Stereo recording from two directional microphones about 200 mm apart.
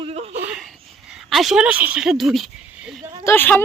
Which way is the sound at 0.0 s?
30° right (ahead or behind).